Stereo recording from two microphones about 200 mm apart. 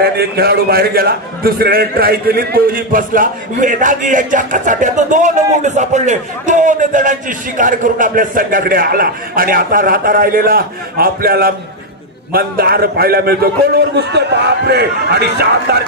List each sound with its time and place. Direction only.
0.0 s a man's voice: 50° right (ahead or behind)